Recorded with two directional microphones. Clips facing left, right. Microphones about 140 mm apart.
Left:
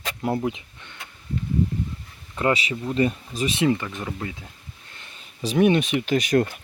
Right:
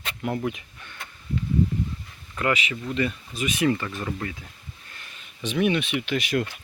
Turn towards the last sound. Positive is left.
turn(degrees=40)  # may be behind; listen again after turning